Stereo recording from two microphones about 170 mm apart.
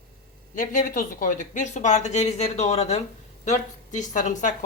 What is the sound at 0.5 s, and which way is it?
Speech, 50° left (ahead or behind).